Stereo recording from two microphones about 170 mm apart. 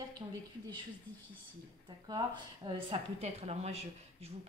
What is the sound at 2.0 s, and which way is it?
Speech, 25° right (ahead or behind).